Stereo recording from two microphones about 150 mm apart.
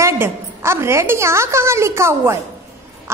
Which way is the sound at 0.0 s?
15° right (ahead or behind).